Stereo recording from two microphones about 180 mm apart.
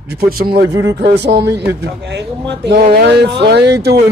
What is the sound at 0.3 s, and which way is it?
A man's voice, 60° right (ahead or behind).